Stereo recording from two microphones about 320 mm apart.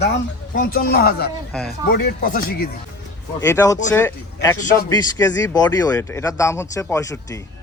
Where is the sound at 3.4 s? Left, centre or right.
Centre.